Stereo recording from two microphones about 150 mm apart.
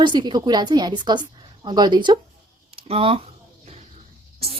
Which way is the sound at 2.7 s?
40° right (ahead or behind).